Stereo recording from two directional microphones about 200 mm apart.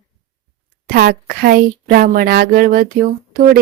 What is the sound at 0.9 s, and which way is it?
Speech, 50° right (ahead or behind).